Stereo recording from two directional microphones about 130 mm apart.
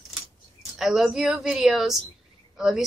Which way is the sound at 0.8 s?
Centre (ahead or behind).